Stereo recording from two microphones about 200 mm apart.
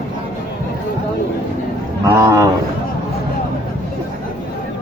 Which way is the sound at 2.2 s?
15° right (ahead or behind).